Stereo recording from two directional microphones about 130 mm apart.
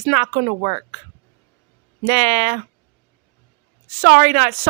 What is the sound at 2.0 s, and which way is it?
Speech, 65° right (ahead or behind).